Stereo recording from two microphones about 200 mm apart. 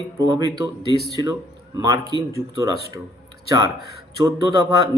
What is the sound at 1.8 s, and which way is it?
Speech, 15° right (ahead or behind).